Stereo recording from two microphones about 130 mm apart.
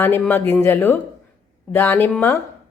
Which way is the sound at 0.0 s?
15° left (ahead or behind).